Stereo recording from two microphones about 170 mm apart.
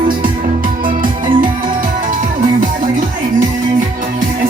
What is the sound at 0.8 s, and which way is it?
Music, 55° right (ahead or behind).